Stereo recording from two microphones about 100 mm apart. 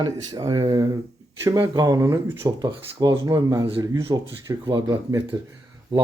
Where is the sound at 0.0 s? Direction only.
45° right (ahead or behind).